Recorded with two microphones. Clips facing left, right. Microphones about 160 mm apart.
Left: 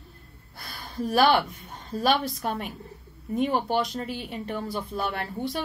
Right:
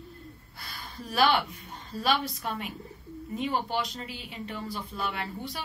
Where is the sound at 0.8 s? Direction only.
45° left (ahead or behind).